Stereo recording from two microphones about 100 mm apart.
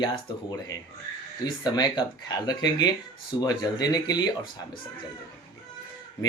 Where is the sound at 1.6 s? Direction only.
45° left (ahead or behind).